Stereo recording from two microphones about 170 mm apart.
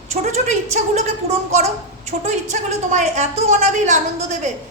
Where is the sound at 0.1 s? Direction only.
45° right (ahead or behind).